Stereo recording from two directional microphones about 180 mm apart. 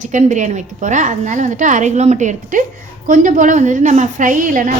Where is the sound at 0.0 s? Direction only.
45° right (ahead or behind).